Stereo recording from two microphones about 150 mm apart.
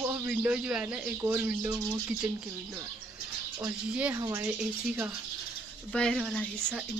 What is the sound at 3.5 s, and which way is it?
Speech, 15° right (ahead or behind).